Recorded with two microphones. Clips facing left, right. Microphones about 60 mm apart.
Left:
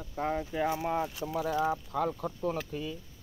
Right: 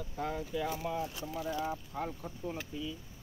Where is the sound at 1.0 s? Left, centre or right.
Left.